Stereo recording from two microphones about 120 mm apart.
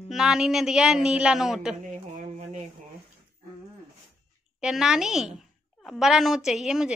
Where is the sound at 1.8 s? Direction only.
80° right.